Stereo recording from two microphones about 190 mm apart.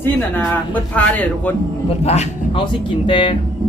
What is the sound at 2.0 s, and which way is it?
A man's voice, 35° left (ahead or behind).